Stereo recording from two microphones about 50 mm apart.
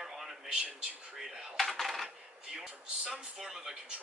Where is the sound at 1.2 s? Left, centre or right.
Centre.